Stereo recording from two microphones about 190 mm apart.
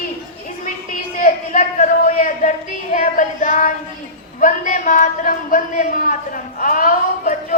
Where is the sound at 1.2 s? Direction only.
45° left (ahead or behind).